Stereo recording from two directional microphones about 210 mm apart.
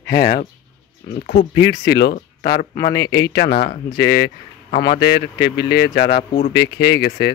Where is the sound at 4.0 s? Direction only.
50° left (ahead or behind).